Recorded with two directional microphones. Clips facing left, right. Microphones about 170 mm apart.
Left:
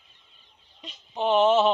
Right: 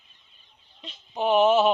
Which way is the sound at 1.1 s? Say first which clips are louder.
Right 1 dB; 5° right (ahead or behind).